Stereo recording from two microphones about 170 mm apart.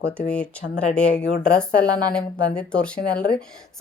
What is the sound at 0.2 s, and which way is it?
Speech, 5° left (ahead or behind).